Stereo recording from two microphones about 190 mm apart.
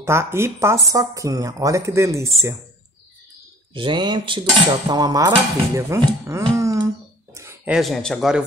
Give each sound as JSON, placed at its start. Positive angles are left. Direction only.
{"t": 0.0, "sound": "speech", "side_deg": -15}
{"t": 3.7, "sound": "cutlery", "side_deg": -25}
{"t": 6.5, "sound": "a sound", "side_deg": -15}
{"t": 7.3, "sound": "speech", "side_deg": -10}